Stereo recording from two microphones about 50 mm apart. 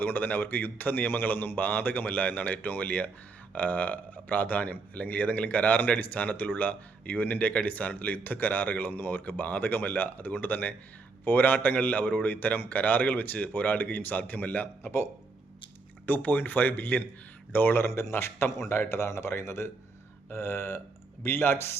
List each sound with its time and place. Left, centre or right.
0.0 s speech: left
16.0 s speech: left
17.8 s speech: left
18.9 s speech: left